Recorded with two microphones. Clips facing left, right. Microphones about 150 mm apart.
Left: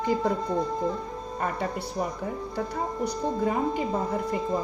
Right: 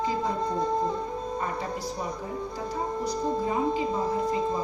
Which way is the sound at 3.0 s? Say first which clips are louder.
Left 2 dB; 60° left (ahead or behind).